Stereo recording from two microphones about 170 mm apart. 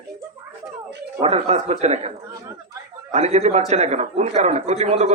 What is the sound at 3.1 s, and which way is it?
A man's voice, 40° right (ahead or behind).